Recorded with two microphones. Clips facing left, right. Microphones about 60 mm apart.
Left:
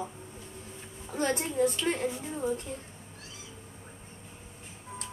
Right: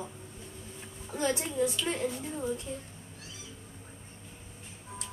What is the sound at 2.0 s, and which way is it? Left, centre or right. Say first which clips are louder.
Speech: left 2 dB; left.